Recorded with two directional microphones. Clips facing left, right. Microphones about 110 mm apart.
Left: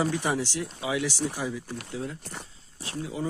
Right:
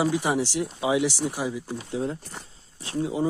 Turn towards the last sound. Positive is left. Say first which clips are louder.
# right 6 dB
turn(degrees=-25)  # may be behind; listen again after turning